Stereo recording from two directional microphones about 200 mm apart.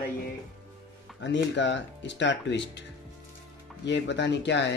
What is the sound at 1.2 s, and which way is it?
Speech, 65° left (ahead or behind).